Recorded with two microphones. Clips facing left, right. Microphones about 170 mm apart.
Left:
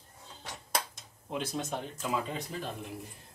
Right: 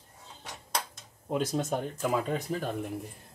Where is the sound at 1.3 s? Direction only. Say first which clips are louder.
Right 6 dB; 45° right (ahead or behind).